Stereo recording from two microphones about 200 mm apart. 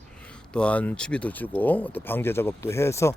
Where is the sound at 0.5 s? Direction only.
5° left (ahead or behind).